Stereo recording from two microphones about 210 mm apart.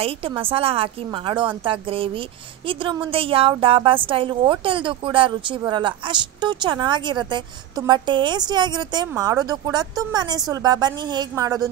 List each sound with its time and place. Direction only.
0.0 s a woman's voice: 25° right (ahead or behind)